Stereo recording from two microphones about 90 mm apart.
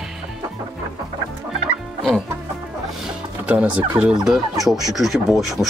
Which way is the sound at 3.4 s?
10° right (ahead or behind).